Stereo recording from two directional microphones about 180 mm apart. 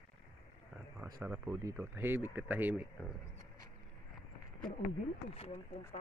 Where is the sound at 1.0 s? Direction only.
10° right (ahead or behind).